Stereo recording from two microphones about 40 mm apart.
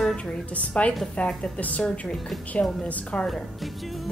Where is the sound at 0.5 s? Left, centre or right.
Left.